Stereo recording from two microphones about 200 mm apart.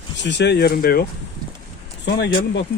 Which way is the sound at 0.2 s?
60° left (ahead or behind).